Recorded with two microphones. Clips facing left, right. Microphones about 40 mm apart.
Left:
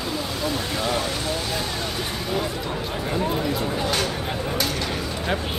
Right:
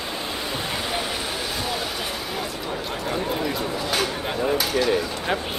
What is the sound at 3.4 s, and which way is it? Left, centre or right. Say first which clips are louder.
Speech: left 1 dB; centre.